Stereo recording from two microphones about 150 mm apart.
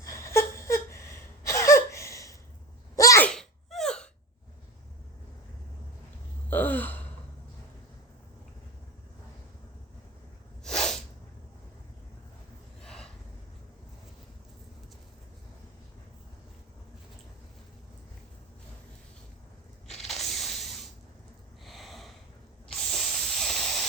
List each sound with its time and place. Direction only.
0.0 s a sound: 20° left (ahead or behind)
2.9 s sneeze: 20° left (ahead or behind)
3.2 s sneeze: 5° left (ahead or behind)
6.5 s gasp: 10° left (ahead or behind)
10.6 s sneeze: 5° left (ahead or behind)
12.8 s gasp: 5° left (ahead or behind)
20.1 s spray: centre (ahead or behind)
21.6 s snort: centre (ahead or behind)
22.9 s hiss: centre (ahead or behind)